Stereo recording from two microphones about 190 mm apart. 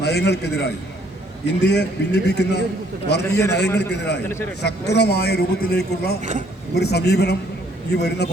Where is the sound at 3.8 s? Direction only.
60° left (ahead or behind).